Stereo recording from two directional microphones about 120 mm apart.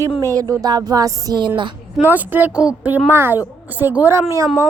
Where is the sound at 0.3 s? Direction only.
30° right (ahead or behind).